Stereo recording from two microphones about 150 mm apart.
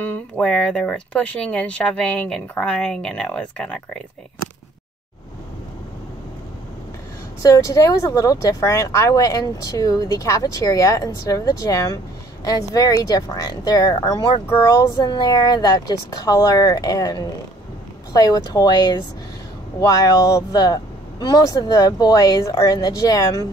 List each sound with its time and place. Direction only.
0.0 s speech: 10° left (ahead or behind)
7.4 s speech: 20° left (ahead or behind)